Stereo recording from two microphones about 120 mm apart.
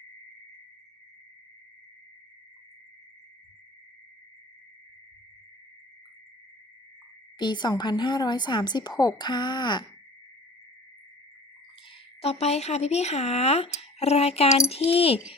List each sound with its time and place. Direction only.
7.3 s a woman's voice: 40° left (ahead or behind)
12.2 s speech: 60° left (ahead or behind)